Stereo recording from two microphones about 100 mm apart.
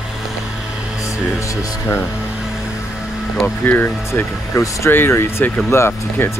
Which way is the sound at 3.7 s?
20° left (ahead or behind).